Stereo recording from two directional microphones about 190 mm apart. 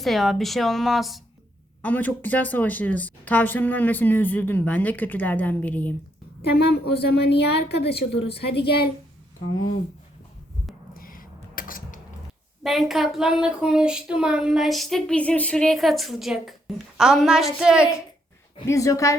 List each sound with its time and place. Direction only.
0.0 s speech: centre (ahead or behind)
6.4 s a woman's voice: 60° left (ahead or behind)
10.9 s a sound: 50° left (ahead or behind)
12.6 s speech: centre (ahead or behind)
18.7 s speech: 15° left (ahead or behind)